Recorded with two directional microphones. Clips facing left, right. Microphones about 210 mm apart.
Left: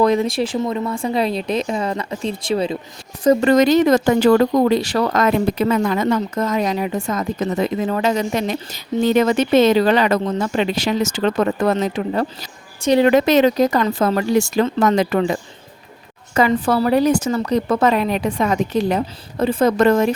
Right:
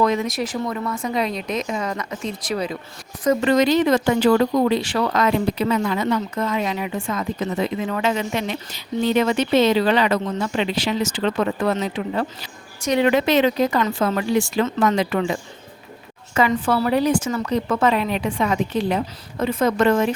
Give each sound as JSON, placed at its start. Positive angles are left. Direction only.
{"t": 0.0, "sound": "speech", "side_deg": 35}
{"t": 3.2, "sound": "speech", "side_deg": 45}